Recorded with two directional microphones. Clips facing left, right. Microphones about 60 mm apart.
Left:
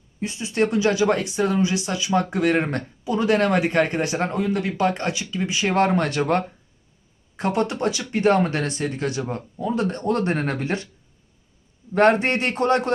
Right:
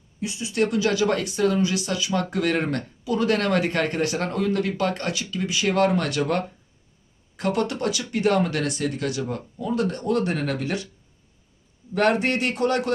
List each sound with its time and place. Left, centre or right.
0.2 s speech: left
11.9 s speech: left